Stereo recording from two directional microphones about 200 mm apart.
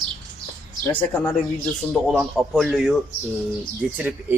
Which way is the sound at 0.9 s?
10° left (ahead or behind).